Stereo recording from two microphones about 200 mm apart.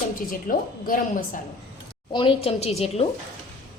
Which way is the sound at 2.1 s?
25° left (ahead or behind).